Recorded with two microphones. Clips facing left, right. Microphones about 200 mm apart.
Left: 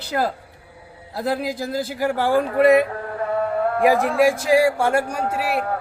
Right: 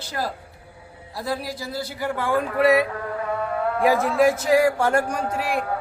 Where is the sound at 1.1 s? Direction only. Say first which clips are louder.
Left 5 dB; 55° left (ahead or behind).